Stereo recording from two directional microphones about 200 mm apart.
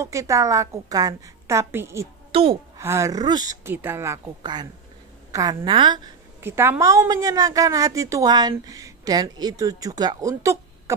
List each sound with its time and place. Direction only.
0.0 s a woman's voice: 15° right (ahead or behind)
2.3 s a woman's voice: 25° right (ahead or behind)
2.8 s a woman's voice: 15° right (ahead or behind)
6.4 s a woman's voice: 10° right (ahead or behind)